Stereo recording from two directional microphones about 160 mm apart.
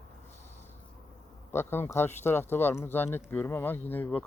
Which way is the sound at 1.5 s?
15° left (ahead or behind).